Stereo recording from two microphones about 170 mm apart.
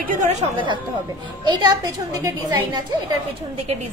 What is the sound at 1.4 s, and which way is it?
A woman's voice, 20° right (ahead or behind).